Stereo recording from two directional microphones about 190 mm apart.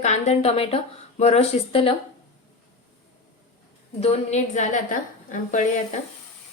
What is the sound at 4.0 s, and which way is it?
Speech, 35° left (ahead or behind).